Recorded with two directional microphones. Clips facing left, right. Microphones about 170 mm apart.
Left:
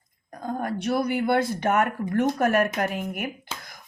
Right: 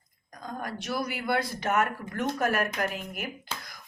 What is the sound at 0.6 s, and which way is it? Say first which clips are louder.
Speech: left 7 dB; 55° left (ahead or behind).